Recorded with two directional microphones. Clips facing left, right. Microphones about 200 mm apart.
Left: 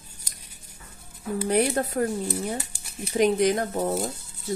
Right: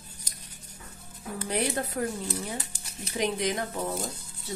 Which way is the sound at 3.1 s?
45° left (ahead or behind).